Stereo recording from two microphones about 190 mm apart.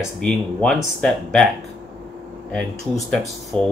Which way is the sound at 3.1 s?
5° left (ahead or behind).